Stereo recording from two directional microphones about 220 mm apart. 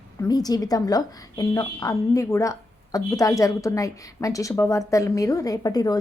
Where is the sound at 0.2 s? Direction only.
15° left (ahead or behind).